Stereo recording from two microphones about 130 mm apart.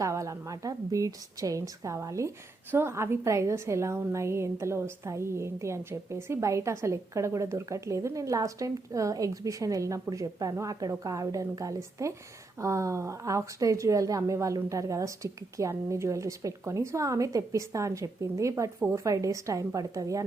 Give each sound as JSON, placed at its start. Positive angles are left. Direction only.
{"t": 0.0, "sound": "a woman's voice", "side_deg": -25}